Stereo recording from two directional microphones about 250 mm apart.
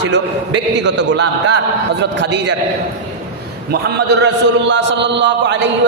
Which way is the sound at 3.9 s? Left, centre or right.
Right.